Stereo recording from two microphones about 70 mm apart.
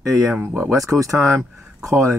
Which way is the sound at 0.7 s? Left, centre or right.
Right.